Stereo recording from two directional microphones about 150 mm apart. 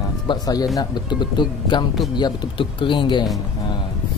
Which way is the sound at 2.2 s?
30° left (ahead or behind).